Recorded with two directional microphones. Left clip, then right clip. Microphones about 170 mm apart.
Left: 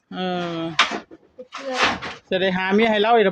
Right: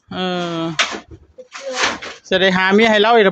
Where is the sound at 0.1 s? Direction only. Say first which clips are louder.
Right 4 dB; 20° right (ahead or behind).